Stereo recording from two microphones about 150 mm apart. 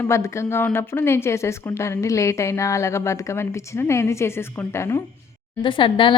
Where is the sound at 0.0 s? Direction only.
20° left (ahead or behind).